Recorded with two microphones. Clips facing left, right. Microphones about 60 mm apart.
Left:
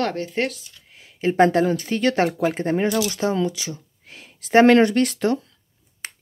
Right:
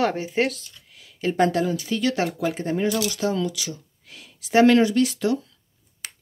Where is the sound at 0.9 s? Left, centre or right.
Left.